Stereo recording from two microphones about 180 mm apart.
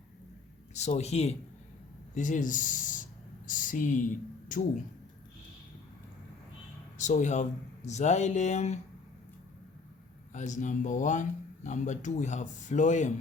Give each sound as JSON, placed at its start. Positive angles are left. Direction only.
{"t": 0.7, "sound": "speech", "side_deg": 40}
{"t": 7.0, "sound": "speech", "side_deg": 45}
{"t": 10.3, "sound": "speech", "side_deg": 45}